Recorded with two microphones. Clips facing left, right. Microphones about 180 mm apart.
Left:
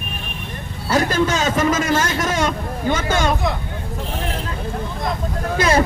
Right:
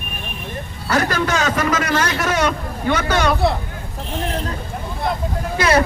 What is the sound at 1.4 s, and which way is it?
Speech, 25° left (ahead or behind).